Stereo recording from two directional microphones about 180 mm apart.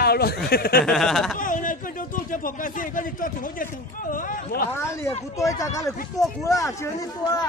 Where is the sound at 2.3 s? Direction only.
50° left (ahead or behind).